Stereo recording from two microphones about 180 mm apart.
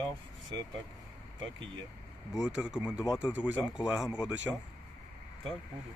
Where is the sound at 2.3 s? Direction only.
5° right (ahead or behind).